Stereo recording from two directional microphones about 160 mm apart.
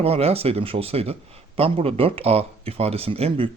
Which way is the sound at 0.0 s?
40° right (ahead or behind).